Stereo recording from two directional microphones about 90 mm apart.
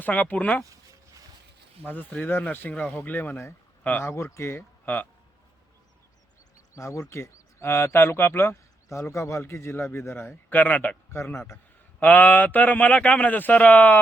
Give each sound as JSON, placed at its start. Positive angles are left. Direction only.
{"t": 0.0, "sound": "speech", "side_deg": 15}
{"t": 0.6, "sound": "a sound", "side_deg": -40}
{"t": 1.8, "sound": "speech", "side_deg": 20}
{"t": 6.7, "sound": "speech", "side_deg": 35}
{"t": 11.1, "sound": "a sound", "side_deg": 30}
{"t": 12.0, "sound": "speech", "side_deg": 15}